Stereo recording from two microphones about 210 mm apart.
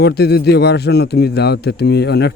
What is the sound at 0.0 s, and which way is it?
Speech, 50° left (ahead or behind).